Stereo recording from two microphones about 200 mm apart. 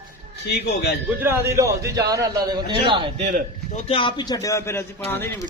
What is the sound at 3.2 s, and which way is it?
Speech, 40° right (ahead or behind).